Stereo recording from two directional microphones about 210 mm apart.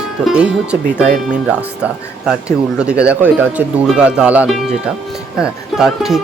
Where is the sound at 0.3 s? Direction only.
5° right (ahead or behind).